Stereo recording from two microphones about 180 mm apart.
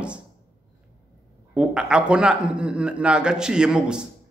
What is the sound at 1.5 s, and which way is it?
A man's voice, 5° right (ahead or behind).